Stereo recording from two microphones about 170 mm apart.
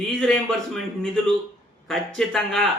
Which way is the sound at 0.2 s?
Centre (ahead or behind).